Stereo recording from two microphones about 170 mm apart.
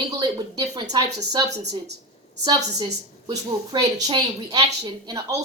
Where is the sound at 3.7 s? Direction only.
25° right (ahead or behind).